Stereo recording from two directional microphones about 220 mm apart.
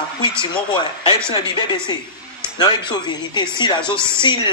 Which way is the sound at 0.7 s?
20° left (ahead or behind).